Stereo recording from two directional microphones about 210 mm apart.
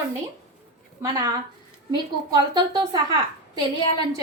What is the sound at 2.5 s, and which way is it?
Speech, 20° right (ahead or behind).